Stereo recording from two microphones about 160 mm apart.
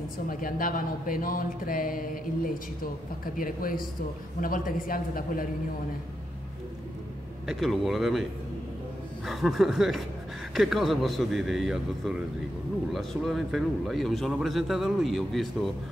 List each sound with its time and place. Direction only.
0.3 s speech: 60° left (ahead or behind)
7.4 s speech: centre (ahead or behind)